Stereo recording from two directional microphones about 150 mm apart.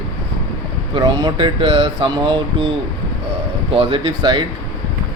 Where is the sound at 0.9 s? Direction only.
30° right (ahead or behind).